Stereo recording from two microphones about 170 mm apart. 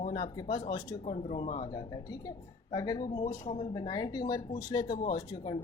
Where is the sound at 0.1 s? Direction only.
25° left (ahead or behind).